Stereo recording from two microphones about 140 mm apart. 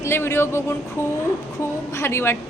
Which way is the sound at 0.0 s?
15° left (ahead or behind).